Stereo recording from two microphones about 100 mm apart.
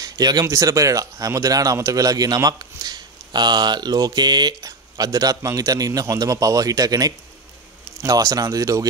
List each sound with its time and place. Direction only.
0.0 s speech: 40° right (ahead or behind)